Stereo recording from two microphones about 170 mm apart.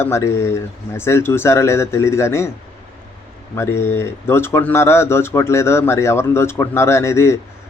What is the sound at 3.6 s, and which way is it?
Speech, 15° left (ahead or behind).